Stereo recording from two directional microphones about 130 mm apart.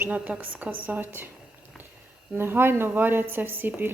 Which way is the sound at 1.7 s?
Centre (ahead or behind).